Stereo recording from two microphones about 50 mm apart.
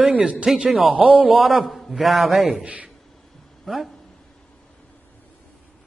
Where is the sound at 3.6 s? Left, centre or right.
Centre.